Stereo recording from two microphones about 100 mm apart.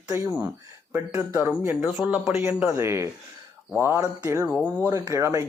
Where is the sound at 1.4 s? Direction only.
20° right (ahead or behind).